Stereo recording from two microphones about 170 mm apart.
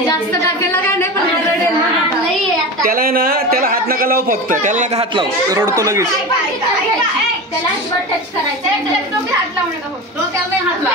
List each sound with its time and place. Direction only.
2.8 s a man's voice: 60° right (ahead or behind)
5.1 s speech: 20° right (ahead or behind)